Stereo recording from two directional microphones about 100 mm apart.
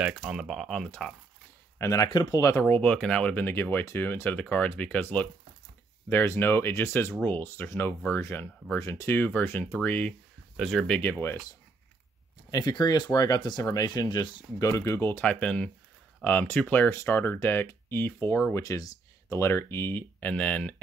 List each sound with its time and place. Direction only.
0.0 s speech: 5° right (ahead or behind)
1.8 s speech: 30° left (ahead or behind)
2.0 s speech: 45° left (ahead or behind)
2.6 s speech: 10° left (ahead or behind)
10.5 s speech: 5° left (ahead or behind); by 11.3 s 20° left (ahead or behind)
12.4 s speech: 40° left (ahead or behind)
14.6 s speech: 30° left (ahead or behind)
15.2 s speech: 10° left (ahead or behind)
18.6 s speech: 35° left (ahead or behind); by 20.7 s 10° left (ahead or behind)